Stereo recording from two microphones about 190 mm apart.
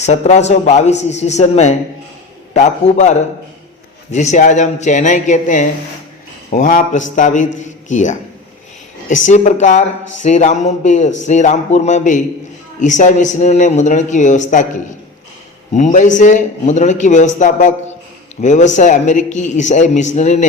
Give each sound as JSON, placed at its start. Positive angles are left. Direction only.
{"t": 0.0, "sound": "a man's voice", "side_deg": 35}